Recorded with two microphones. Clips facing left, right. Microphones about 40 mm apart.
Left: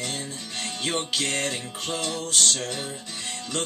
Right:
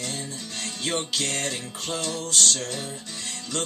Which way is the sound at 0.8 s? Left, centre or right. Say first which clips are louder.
Even; centre.